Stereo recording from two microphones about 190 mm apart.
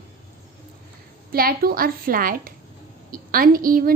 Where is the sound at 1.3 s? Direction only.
50° right (ahead or behind).